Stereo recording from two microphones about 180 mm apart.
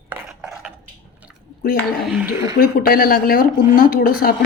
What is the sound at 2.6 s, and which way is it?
Speech, 55° left (ahead or behind).